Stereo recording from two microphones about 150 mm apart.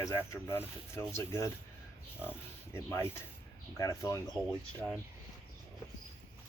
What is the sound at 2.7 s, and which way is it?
Speech, 15° left (ahead or behind).